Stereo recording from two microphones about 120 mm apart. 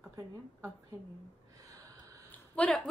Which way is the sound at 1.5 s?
30° right (ahead or behind).